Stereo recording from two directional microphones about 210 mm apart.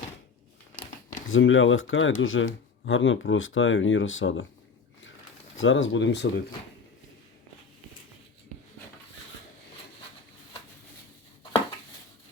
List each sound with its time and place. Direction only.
1.3 s speech: 65° left (ahead or behind)
5.5 s speech: 65° left (ahead or behind)